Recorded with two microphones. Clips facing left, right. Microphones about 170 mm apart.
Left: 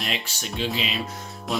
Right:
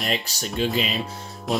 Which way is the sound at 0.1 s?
40° right (ahead or behind).